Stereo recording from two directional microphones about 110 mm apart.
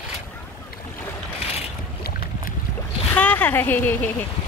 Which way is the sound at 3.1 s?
15° left (ahead or behind).